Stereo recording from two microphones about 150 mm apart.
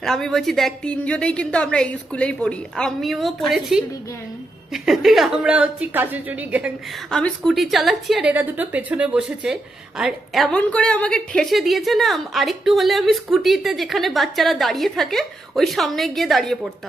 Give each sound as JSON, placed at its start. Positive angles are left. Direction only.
{"t": 0.0, "sound": "a woman's voice", "side_deg": 5}
{"t": 7.1, "sound": "a woman's voice", "side_deg": 5}